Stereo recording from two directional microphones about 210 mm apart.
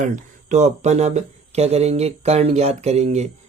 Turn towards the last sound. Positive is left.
turn(degrees=-30)  # may be behind; listen again after turning